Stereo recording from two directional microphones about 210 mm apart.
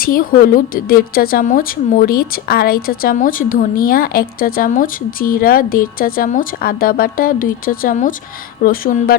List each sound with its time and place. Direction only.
0.0 s a woman's voice: 45° left (ahead or behind)